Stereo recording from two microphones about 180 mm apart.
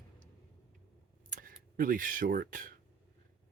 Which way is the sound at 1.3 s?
50° right (ahead or behind).